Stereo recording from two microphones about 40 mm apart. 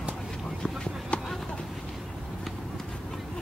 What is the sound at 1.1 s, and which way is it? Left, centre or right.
Clip-clop, left.